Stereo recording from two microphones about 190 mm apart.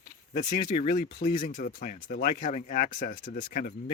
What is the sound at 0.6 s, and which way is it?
Rub, 45° left (ahead or behind).